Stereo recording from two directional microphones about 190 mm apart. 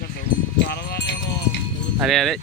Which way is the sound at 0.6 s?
60° left (ahead or behind).